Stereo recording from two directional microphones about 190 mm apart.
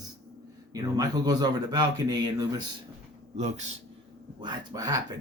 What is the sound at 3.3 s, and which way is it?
Speech, 35° right (ahead or behind).